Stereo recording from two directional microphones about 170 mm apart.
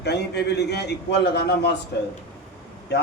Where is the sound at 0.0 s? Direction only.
80° left.